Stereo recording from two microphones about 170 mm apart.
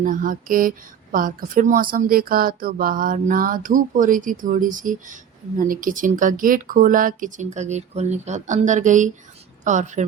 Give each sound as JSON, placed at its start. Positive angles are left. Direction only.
{"t": 0.0, "sound": "speech", "side_deg": -50}